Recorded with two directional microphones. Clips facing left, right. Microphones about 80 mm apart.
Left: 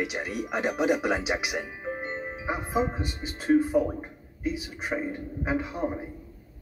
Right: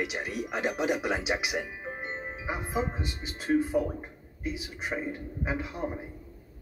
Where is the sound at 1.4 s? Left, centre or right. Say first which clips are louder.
Left 1 dB; left.